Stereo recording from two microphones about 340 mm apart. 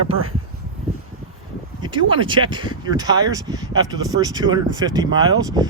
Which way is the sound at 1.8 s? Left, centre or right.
Centre.